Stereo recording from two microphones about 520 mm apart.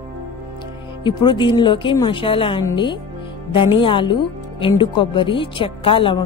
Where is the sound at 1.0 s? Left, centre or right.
Centre.